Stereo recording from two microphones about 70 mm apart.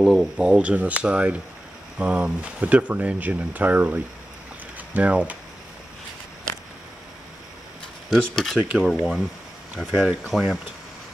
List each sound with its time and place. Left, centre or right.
0.0 s speech: centre
8.1 s speech: centre
8.5 s speech: centre
8.8 s speech: centre
9.8 s speech: centre